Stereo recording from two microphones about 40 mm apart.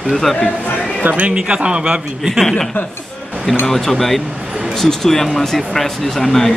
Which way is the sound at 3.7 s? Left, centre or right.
Centre.